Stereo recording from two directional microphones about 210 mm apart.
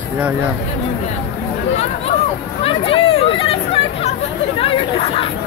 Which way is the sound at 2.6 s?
25° left (ahead or behind).